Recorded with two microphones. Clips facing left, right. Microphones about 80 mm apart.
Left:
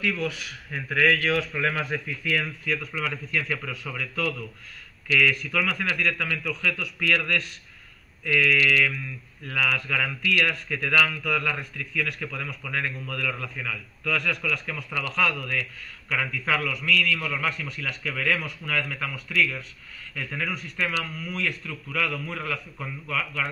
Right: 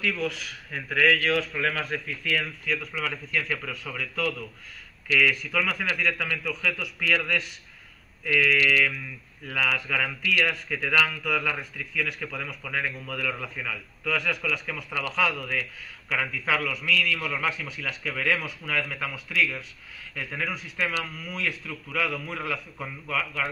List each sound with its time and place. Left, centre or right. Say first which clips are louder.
0.0 s speech: left 1 dB; centre